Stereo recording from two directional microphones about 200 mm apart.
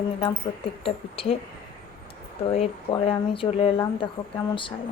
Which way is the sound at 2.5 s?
25° left (ahead or behind).